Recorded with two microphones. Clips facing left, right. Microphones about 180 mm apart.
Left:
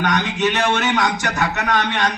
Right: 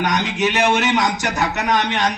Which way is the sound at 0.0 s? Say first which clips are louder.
Even; 15° right (ahead or behind).